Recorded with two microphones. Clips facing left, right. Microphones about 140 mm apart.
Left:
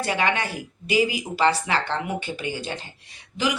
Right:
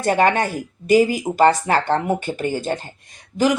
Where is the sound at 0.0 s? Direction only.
45° right (ahead or behind).